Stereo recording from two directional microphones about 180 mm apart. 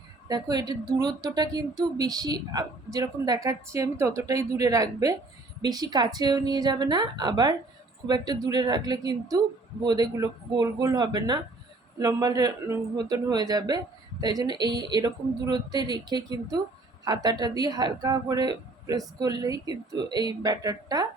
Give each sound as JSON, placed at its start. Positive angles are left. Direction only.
{"t": 0.3, "sound": "speech", "side_deg": -20}